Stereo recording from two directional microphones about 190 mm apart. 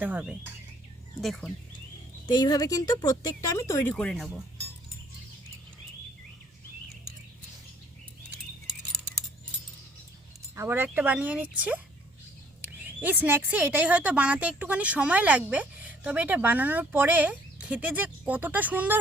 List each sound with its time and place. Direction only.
0.0 s speech: 5° right (ahead or behind)
2.2 s speech: 20° left (ahead or behind)
3.9 s speech: centre (ahead or behind)
10.5 s speech: 10° right (ahead or behind)
12.6 s speech: 10° right (ahead or behind)